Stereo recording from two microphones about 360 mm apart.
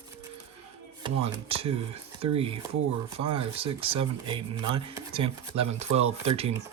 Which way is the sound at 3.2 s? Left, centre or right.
Right.